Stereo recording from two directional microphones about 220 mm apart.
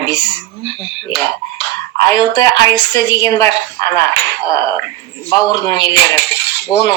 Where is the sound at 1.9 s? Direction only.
15° left (ahead or behind).